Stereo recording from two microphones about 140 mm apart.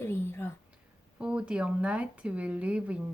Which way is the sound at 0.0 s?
15° left (ahead or behind).